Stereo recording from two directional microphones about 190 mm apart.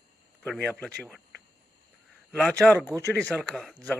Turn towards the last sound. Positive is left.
turn(degrees=0)  # may be behind; listen again after turning